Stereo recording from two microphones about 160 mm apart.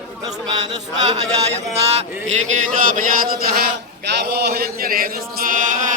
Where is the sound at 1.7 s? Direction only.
40° right (ahead or behind).